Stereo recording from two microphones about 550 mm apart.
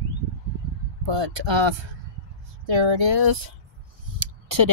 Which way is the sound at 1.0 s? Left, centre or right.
Right.